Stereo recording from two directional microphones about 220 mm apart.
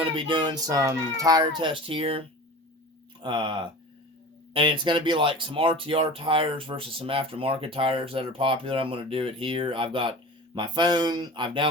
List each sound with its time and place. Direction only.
0.0 s speech: 25° right (ahead or behind)